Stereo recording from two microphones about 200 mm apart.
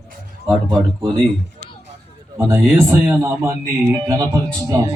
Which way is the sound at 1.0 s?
20° right (ahead or behind).